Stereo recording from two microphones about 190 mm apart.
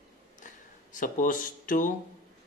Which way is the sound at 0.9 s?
45° left (ahead or behind).